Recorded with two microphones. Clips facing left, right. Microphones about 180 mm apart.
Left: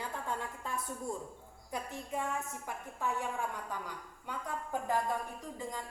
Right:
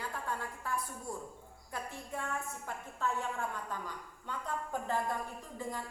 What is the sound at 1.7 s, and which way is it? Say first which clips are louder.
A woman's voice: left 3 dB; 15° left (ahead or behind).